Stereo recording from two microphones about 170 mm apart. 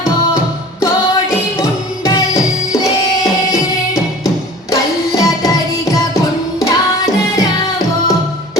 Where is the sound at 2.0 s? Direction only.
20° left (ahead or behind).